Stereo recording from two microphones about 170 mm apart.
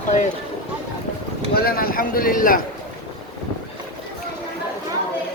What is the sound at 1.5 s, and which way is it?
A man's voice, 65° left (ahead or behind).